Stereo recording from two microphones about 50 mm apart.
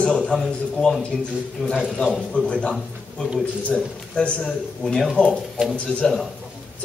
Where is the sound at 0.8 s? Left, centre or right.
Centre.